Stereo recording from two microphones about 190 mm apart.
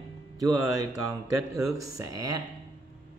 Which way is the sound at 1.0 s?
15° right (ahead or behind).